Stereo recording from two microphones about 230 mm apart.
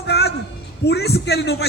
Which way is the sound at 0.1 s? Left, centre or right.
Left.